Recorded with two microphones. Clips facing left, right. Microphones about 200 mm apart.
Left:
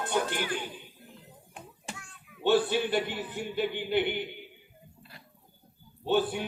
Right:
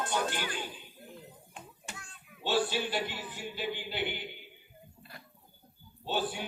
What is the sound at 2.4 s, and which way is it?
A man's voice, 55° left (ahead or behind).